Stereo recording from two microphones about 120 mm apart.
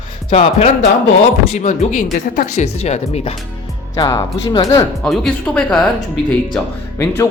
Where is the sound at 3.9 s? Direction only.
25° left (ahead or behind).